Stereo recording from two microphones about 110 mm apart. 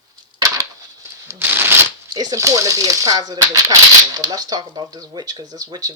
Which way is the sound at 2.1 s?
35° right (ahead or behind).